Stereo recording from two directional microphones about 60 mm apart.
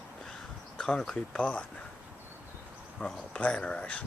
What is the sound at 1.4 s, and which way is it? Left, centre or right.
Speech, left.